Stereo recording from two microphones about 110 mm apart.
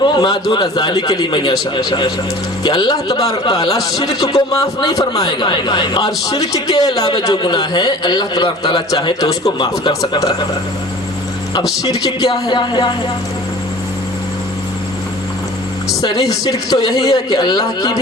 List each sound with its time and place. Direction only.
0.0 s a man's voice: 40° left (ahead or behind)
11.8 s a man's voice: 35° left (ahead or behind)
16.0 s a man's voice: 35° left (ahead or behind)